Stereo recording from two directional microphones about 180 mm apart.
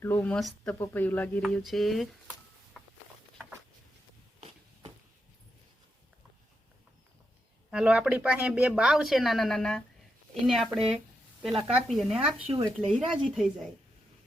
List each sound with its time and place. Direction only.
0.0 s speech: 10° left (ahead or behind)
7.7 s speech: 5° right (ahead or behind)
12.5 s speech: 35° right (ahead or behind)
13.3 s speech: centre (ahead or behind)